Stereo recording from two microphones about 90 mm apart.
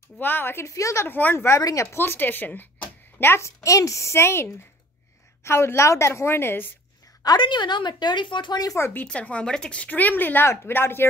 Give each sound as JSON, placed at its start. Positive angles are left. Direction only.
{"t": 0.2, "sound": "speech", "side_deg": 25}
{"t": 1.0, "sound": "speech", "side_deg": 20}
{"t": 7.3, "sound": "a woman's voice", "side_deg": 60}
{"t": 8.7, "sound": "speech", "side_deg": 25}
{"t": 9.0, "sound": "speech", "side_deg": 10}